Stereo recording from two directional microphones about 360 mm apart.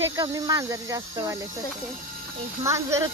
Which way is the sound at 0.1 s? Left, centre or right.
Centre.